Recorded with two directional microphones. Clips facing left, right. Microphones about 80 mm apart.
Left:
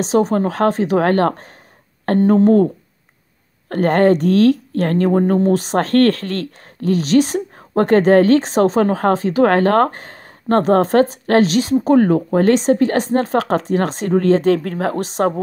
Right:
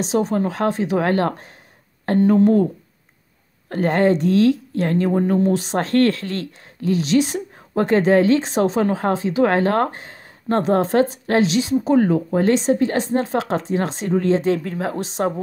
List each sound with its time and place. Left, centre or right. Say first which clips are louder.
0.0 s speech: left 4 dB; left